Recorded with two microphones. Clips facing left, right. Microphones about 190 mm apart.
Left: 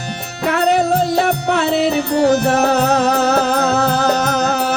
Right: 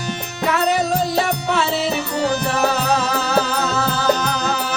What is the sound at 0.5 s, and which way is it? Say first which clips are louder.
Music: left 4 dB; 60° left (ahead or behind).